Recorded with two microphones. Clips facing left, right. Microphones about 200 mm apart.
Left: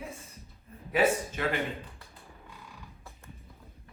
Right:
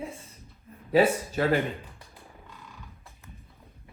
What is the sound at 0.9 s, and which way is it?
Speech, 35° right (ahead or behind).